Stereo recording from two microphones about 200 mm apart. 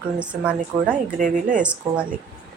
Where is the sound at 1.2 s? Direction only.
40° right (ahead or behind).